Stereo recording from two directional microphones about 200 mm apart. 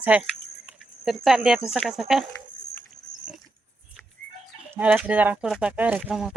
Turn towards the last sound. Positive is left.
turn(degrees=0)  # may be behind; listen again after turning